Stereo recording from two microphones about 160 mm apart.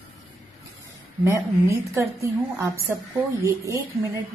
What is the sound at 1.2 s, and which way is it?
A woman's voice, 20° right (ahead or behind).